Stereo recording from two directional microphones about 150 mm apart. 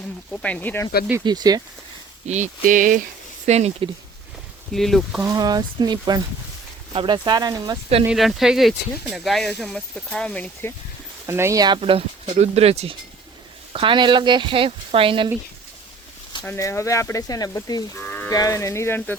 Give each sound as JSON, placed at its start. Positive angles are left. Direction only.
{"t": 0.3, "sound": "speech", "side_deg": 10}
{"t": 1.2, "sound": "speech", "side_deg": -25}
{"t": 2.2, "sound": "a sound", "side_deg": -50}
{"t": 3.4, "sound": "speech", "side_deg": -45}
{"t": 4.7, "sound": "speech", "side_deg": 0}
{"t": 5.2, "sound": "speech", "side_deg": -25}
{"t": 8.0, "sound": "speech", "side_deg": 0}
{"t": 11.3, "sound": "speech", "side_deg": -15}
{"t": 11.8, "sound": "speech", "side_deg": -40}
{"t": 16.6, "sound": "speech", "side_deg": 20}
{"t": 18.0, "sound": "livestock", "side_deg": 10}
{"t": 18.3, "sound": "speech", "side_deg": 20}